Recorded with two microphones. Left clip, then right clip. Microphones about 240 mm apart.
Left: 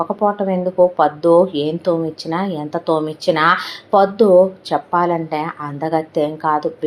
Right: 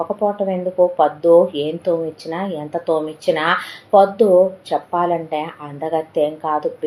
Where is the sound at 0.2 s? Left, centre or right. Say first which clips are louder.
Left 2 dB; left.